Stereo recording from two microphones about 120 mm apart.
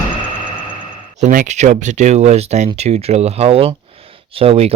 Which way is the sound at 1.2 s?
85° right.